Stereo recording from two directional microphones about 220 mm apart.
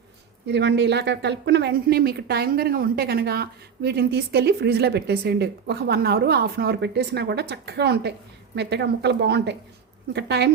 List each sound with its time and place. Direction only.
0.4 s speech: 50° right (ahead or behind)